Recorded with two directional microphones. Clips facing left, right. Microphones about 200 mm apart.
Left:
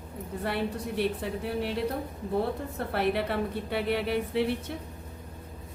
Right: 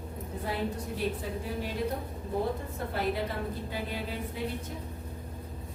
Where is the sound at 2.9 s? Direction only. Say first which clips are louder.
Left 4 dB; 70° left (ahead or behind).